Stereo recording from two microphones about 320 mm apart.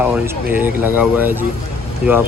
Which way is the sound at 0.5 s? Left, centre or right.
Centre.